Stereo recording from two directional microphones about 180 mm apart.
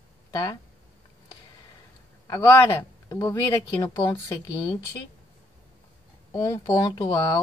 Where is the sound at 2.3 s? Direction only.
15° left (ahead or behind).